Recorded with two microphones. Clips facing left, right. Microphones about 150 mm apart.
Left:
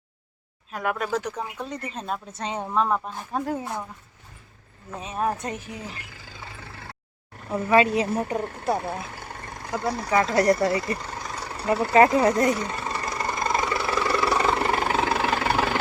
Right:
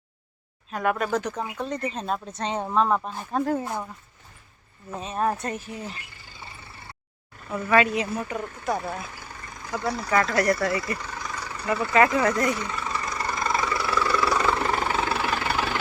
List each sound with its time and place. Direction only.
0.7 s a woman's voice: 5° left (ahead or behind)
4.9 s a woman's voice: 10° left (ahead or behind)
6.1 s vehicle: 90° left
7.5 s speech: 30° left (ahead or behind)
8.6 s speech: 30° left (ahead or behind)
9.1 s vehicle: 55° left (ahead or behind)
9.6 s speech: 25° left (ahead or behind)
13.1 s vehicle: 25° left (ahead or behind)